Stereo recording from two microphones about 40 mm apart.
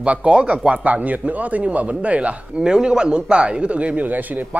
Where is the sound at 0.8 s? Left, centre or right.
Right.